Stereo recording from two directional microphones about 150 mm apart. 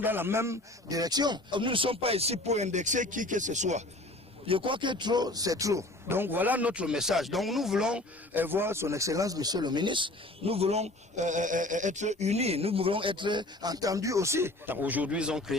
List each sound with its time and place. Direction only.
0.0 s speech: 15° right (ahead or behind); by 3.8 s 50° right (ahead or behind)
4.4 s speech: 35° right (ahead or behind); by 15.5 s 5° right (ahead or behind)